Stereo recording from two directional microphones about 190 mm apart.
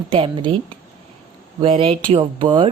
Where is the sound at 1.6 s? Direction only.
30° right (ahead or behind).